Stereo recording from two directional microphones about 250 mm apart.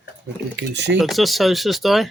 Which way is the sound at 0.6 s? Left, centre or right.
Right.